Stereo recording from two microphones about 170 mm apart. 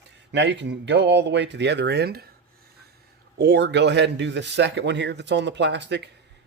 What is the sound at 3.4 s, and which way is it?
Speech, 80° right.